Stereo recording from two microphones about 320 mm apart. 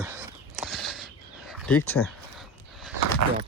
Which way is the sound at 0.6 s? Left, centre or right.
Centre.